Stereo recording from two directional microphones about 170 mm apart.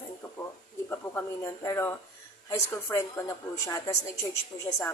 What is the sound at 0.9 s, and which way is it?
A woman's voice, 15° left (ahead or behind).